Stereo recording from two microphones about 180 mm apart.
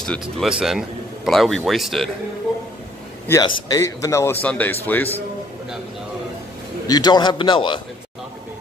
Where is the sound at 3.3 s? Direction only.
20° left (ahead or behind).